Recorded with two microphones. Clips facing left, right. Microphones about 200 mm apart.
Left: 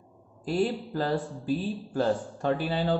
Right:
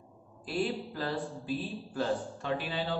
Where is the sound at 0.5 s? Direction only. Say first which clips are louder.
Left 5 dB; 45° left (ahead or behind).